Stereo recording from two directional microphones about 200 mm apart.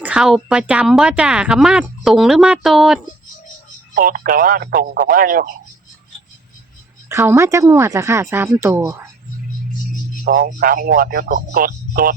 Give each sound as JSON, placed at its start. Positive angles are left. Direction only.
{"t": 0.0, "sound": "speech", "side_deg": -5}
{"t": 3.9, "sound": "speech", "side_deg": -45}
{"t": 7.1, "sound": "speech", "side_deg": -15}
{"t": 10.2, "sound": "speech", "side_deg": -45}